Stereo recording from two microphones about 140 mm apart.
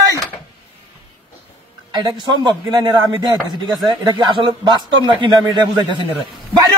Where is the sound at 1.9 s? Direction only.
30° right (ahead or behind).